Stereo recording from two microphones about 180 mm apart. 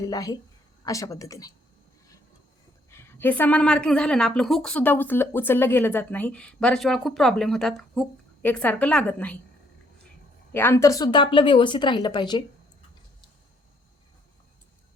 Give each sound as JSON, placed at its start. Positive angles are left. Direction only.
{"t": 0.0, "sound": "speech", "side_deg": 20}
{"t": 2.9, "sound": "a woman's voice", "side_deg": 15}
{"t": 10.5, "sound": "speech", "side_deg": 10}